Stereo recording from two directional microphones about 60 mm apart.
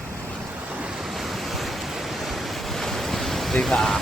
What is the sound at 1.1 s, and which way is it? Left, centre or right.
Waves, centre.